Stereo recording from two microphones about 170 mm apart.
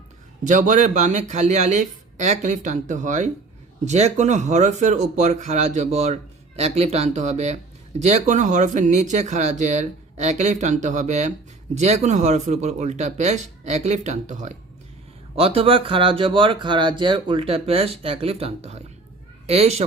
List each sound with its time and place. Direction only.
0.4 s speech: 50° right (ahead or behind)